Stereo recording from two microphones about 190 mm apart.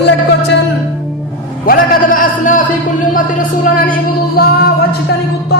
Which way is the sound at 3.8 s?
50° left (ahead or behind).